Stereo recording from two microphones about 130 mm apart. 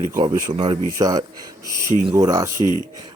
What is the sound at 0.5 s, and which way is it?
Speech, 45° right (ahead or behind).